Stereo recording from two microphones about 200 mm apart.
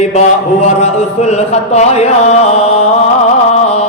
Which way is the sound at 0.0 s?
35° left (ahead or behind).